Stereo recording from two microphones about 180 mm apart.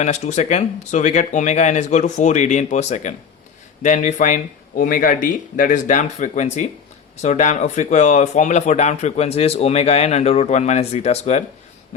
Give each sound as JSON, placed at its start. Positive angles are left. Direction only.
{"t": 0.0, "sound": "speech", "side_deg": 40}